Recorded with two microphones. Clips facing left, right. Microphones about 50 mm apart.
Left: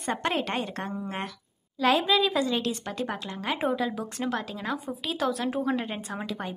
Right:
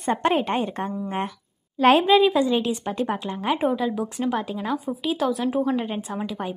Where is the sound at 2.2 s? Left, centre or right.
Centre.